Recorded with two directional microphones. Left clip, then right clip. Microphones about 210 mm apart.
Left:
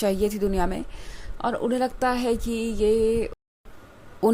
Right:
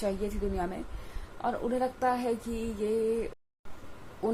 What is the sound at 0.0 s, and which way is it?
A woman's voice, 45° left (ahead or behind).